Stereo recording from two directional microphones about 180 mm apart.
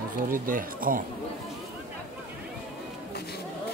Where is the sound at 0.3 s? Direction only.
50° right (ahead or behind).